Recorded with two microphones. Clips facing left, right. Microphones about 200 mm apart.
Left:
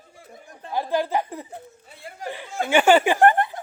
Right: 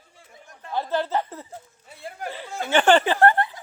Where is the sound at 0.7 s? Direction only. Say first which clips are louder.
Left 1 dB; 10° left (ahead or behind).